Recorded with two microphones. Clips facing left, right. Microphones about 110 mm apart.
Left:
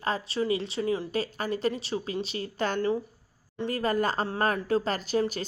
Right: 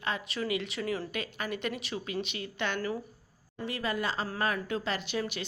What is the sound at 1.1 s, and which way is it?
A woman's voice, 35° left (ahead or behind).